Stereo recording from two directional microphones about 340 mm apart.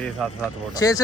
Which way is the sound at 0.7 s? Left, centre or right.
Centre.